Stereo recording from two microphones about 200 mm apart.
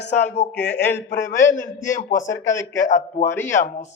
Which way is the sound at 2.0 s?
40° left (ahead or behind).